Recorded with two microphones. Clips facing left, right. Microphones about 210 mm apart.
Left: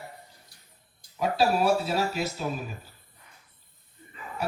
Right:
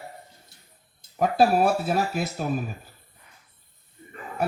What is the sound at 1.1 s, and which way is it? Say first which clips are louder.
Speech: right 4 dB; 50° right (ahead or behind).